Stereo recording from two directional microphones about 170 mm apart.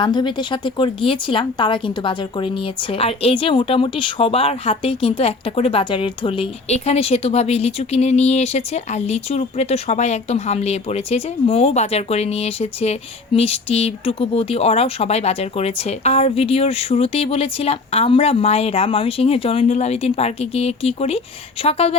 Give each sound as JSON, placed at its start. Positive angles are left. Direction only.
{"t": 0.0, "sound": "speech", "side_deg": 25}